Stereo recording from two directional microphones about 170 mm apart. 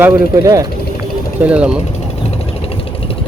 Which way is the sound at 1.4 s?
5° right (ahead or behind).